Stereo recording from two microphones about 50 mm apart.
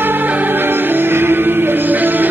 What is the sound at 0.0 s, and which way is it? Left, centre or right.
Music, right.